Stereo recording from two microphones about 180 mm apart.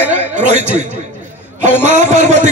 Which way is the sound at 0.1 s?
40° right (ahead or behind).